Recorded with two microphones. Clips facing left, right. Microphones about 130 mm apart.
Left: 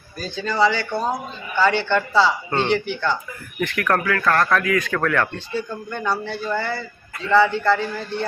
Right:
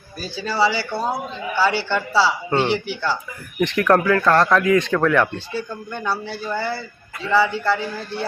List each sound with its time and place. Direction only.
0.2 s a man's voice: 5° right (ahead or behind)
3.6 s speech: 20° right (ahead or behind)
5.5 s a man's voice: 5° right (ahead or behind)